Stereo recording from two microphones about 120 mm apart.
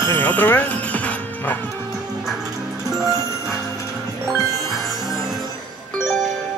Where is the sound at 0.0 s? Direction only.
20° left (ahead or behind).